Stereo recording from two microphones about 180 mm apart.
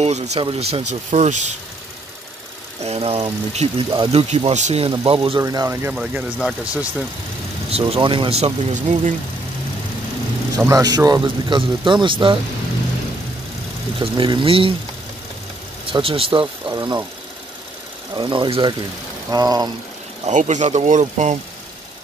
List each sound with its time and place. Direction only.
0.0 s speech: 40° right (ahead or behind)
2.8 s speech: 35° right (ahead or behind)
5.4 s speech: 20° right (ahead or behind)
5.9 s speech: 5° right (ahead or behind)
7.7 s speech: 30° right (ahead or behind)
10.6 s speech: 20° right (ahead or behind)
13.9 s speech: 30° right (ahead or behind)
15.9 s speech: 30° right (ahead or behind)
18.1 s speech: 25° right (ahead or behind)
20.2 s speech: 40° right (ahead or behind)